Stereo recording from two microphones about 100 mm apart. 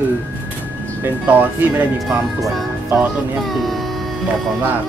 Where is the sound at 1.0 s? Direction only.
20° right (ahead or behind).